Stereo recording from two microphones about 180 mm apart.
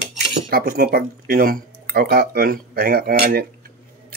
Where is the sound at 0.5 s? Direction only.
55° right (ahead or behind).